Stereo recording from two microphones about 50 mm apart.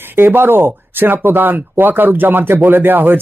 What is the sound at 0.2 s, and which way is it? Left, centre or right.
Speech, right.